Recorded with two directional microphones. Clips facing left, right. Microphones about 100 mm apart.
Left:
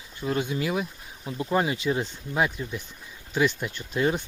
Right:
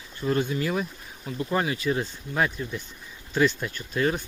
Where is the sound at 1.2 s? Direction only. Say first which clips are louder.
Left 1 dB; 20° left (ahead or behind).